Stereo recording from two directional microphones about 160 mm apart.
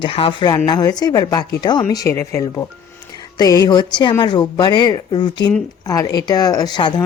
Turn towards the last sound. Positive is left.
turn(degrees=25)  # may be behind; listen again after turning